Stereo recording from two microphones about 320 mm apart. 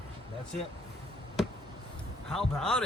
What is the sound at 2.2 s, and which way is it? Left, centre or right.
Speech, centre.